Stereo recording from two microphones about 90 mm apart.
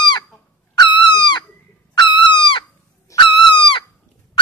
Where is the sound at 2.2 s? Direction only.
65° left (ahead or behind).